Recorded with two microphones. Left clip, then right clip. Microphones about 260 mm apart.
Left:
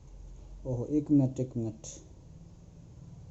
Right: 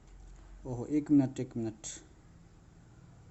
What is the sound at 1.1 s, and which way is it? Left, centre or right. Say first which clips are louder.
Speech: right 1 dB; centre.